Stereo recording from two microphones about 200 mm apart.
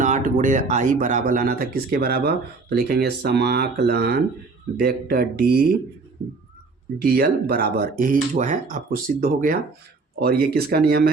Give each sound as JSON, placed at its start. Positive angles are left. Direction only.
{"t": 0.0, "sound": "speech", "side_deg": -40}
{"t": 7.0, "sound": "speech", "side_deg": -50}